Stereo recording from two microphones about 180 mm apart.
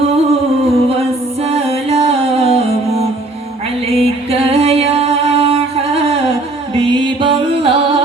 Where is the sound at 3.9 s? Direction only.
35° right (ahead or behind).